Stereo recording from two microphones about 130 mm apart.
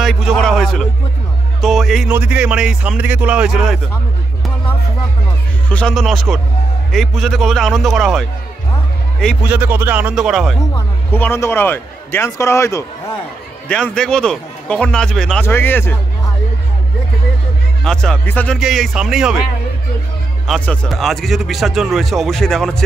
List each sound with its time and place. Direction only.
0.0 s speech: centre (ahead or behind)
2.0 s speech: 10° right (ahead or behind)
5.7 s a man's voice: 10° left (ahead or behind)
5.9 s speech: centre (ahead or behind)
9.4 s speech: 15° right (ahead or behind)
10.7 s a man's voice: 15° left (ahead or behind)
13.7 s a man's voice: 10° left (ahead or behind)
15.4 s a man's voice: 15° left (ahead or behind)
17.8 s a man's voice: 5° left (ahead or behind)
18.6 s speech: centre (ahead or behind)
20.4 s a man's voice: 5° left (ahead or behind)